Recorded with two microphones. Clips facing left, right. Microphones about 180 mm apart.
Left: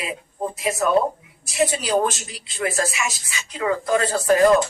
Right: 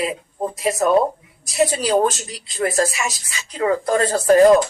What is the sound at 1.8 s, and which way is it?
Speech, 40° right (ahead or behind).